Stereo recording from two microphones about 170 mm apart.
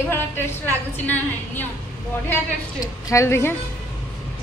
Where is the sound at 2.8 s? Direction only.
15° left (ahead or behind).